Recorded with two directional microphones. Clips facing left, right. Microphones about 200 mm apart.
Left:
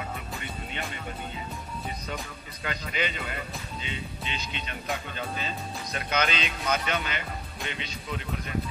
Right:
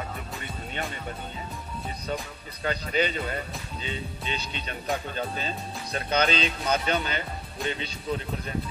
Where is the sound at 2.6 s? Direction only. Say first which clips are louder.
Right 5 dB; 35° right (ahead or behind).